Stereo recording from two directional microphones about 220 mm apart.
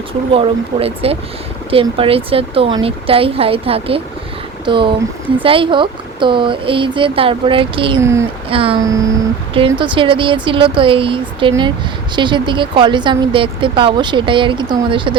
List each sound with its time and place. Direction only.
0.3 s speech: 25° right (ahead or behind)
8.0 s speech: 15° right (ahead or behind)
8.4 s speech: 25° right (ahead or behind)